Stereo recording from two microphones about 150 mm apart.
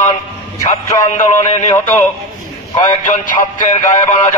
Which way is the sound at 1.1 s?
55° left (ahead or behind).